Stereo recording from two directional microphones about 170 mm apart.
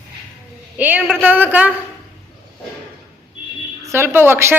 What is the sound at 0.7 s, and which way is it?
Speech, 10° right (ahead or behind).